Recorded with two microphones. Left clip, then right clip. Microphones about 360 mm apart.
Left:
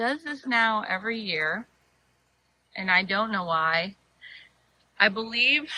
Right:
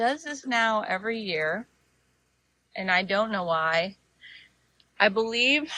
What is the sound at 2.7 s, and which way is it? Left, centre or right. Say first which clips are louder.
A woman's voice: left 1 dB; centre.